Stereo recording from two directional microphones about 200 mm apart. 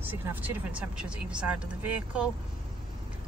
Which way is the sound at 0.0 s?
10° right (ahead or behind).